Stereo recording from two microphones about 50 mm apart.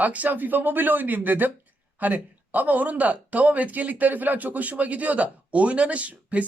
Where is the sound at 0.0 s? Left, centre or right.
Right.